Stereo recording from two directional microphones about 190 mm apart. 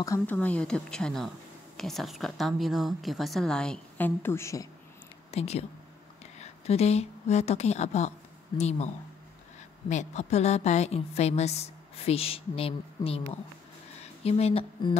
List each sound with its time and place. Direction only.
0.0 s a woman's voice: 10° left (ahead or behind)
5.3 s a woman's voice: 35° left (ahead or behind)